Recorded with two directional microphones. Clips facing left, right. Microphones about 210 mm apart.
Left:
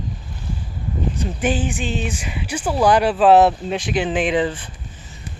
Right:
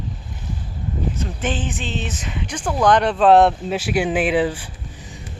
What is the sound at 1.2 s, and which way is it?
Speech, 15° left (ahead or behind).